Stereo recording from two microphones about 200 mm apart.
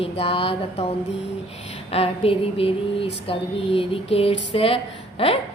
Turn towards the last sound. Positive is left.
turn(degrees=30)  # may be behind; listen again after turning